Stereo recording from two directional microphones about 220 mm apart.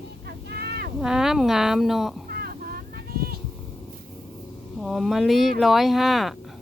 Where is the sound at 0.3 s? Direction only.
45° right (ahead or behind).